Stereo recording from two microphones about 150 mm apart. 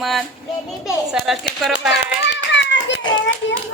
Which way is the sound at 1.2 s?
Centre (ahead or behind).